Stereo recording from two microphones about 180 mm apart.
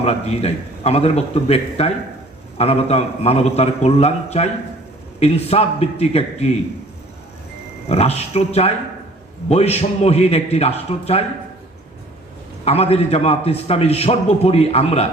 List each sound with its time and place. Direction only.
0.0 s a man's voice: 35° left (ahead or behind)
7.9 s a man's voice: 35° left (ahead or behind)
12.6 s a man's voice: 35° left (ahead or behind)